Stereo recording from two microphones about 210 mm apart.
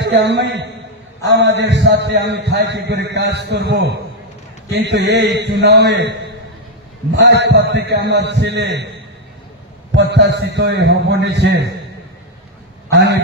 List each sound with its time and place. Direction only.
0.0 s a man's voice: 55° right (ahead or behind)
7.2 s a man's voice: 55° right (ahead or behind)
9.9 s a man's voice: 55° right (ahead or behind)
12.9 s a man's voice: 55° right (ahead or behind)